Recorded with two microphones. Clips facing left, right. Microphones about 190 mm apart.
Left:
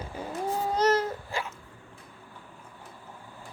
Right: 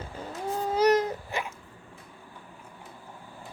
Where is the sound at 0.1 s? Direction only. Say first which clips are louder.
Left 3 dB; 10° left (ahead or behind).